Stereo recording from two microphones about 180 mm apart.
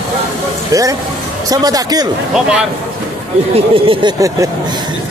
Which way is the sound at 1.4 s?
20° right (ahead or behind).